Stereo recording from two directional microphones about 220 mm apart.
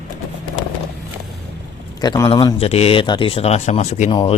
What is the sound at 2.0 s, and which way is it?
Speech, 20° left (ahead or behind).